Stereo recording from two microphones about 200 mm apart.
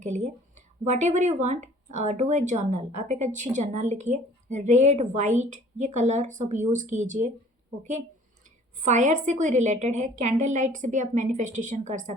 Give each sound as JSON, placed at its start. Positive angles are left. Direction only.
{"t": 0.0, "sound": "speech", "side_deg": -35}
{"t": 8.8, "sound": "speech", "side_deg": -35}